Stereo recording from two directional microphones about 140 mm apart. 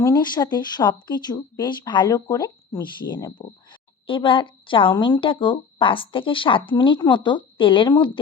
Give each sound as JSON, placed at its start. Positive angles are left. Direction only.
{"t": 0.0, "sound": "speech", "side_deg": 30}